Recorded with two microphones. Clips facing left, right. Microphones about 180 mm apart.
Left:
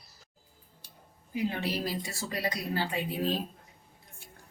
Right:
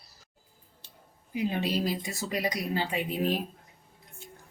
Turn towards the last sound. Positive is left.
turn(degrees=-15)  # may be behind; listen again after turning